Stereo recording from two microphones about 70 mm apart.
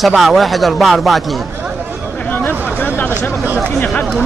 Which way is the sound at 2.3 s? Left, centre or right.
Left.